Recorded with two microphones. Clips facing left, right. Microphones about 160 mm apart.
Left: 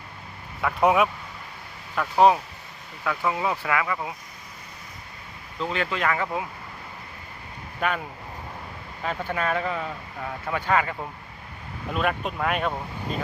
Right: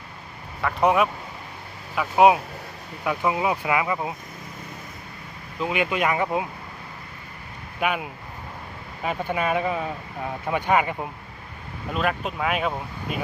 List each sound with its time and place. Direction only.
0.6 s speech: centre (ahead or behind)
2.0 s speech: 10° right (ahead or behind)
5.5 s speech: 10° right (ahead or behind)
7.8 s speech: 10° right (ahead or behind)
9.0 s speech: 15° right (ahead or behind)
11.9 s speech: centre (ahead or behind)